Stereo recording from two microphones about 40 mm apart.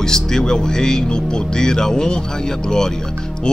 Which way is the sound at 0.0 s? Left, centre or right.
Centre.